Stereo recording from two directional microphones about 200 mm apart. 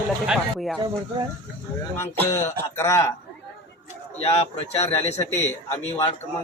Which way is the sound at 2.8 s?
15° left (ahead or behind).